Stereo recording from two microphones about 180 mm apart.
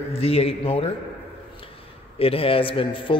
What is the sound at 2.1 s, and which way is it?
A man's voice, 30° left (ahead or behind).